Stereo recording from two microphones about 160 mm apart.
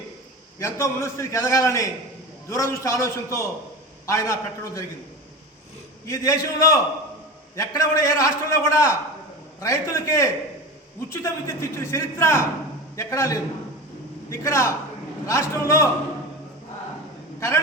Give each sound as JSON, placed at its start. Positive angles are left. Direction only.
{"t": 0.6, "sound": "a man's voice", "side_deg": 15}
{"t": 6.1, "sound": "a man's voice", "side_deg": 20}